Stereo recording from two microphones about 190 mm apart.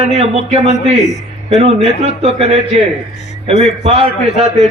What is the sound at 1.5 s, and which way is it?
A man's voice, 30° right (ahead or behind).